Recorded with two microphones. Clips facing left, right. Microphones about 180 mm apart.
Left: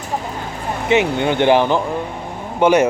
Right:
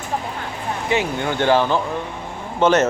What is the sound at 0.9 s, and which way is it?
A man's voice, 20° left (ahead or behind).